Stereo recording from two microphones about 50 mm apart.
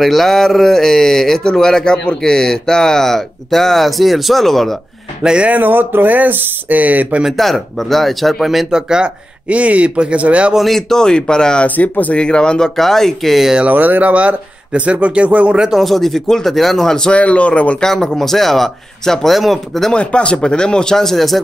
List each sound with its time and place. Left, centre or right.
0.0 s speech: centre
5.2 s speech: centre
5.5 s speech: right
7.2 s speech: centre
8.7 s speech: centre
9.5 s speech: right
10.5 s speech: centre
10.9 s speech: centre
11.6 s speech: left; by 13.5 s centre
13.7 s speech: right
15.8 s speech: centre
17.1 s speech: left
17.7 s speech: centre
19.9 s speech: left; by 21.4 s centre